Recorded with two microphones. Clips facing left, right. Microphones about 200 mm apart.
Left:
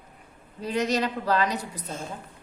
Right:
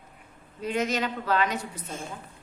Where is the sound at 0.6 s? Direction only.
35° left (ahead or behind).